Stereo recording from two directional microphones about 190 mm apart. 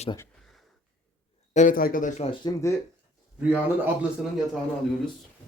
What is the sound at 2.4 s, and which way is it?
Speech, 15° left (ahead or behind).